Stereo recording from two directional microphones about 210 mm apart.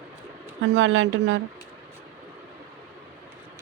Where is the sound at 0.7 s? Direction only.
65° right (ahead or behind).